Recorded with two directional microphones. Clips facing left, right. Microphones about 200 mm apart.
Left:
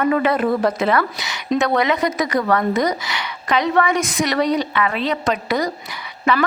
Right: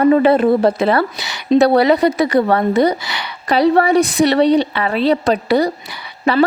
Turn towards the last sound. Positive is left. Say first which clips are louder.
# right 4 dB
turn(degrees=-35)  # may be behind; listen again after turning